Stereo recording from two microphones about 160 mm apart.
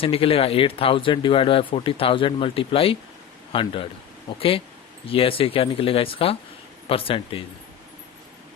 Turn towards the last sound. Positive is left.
turn(degrees=35)  # may be behind; listen again after turning